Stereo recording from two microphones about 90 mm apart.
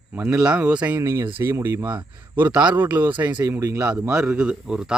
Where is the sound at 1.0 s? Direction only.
30° right (ahead or behind).